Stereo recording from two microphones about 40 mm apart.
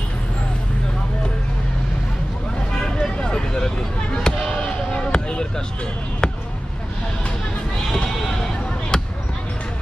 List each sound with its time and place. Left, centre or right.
2.8 s chop: centre
5.1 s basketball bounce: centre
6.2 s a sound: centre
8.9 s basketball bounce: centre